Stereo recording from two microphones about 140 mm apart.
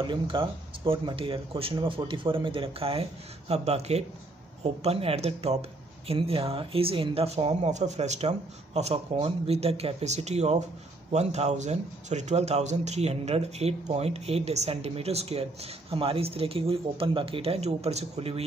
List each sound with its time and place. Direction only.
0.0 s speech: 35° right (ahead or behind)